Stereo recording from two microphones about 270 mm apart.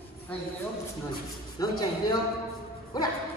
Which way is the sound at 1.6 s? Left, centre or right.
Centre.